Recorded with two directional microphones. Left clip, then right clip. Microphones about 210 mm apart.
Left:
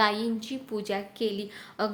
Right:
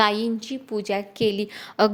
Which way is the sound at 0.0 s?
35° right (ahead or behind).